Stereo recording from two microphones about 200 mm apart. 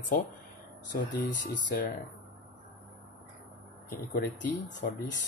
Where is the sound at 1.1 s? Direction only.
60° left (ahead or behind).